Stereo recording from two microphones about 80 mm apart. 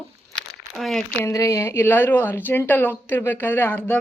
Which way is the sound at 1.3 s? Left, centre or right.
Left.